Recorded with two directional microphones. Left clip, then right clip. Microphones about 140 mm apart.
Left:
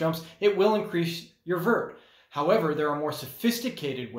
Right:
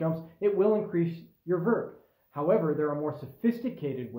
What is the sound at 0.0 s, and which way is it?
Speech, 10° left (ahead or behind).